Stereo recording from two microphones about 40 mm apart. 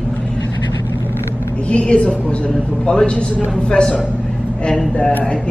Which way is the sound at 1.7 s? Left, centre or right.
Left.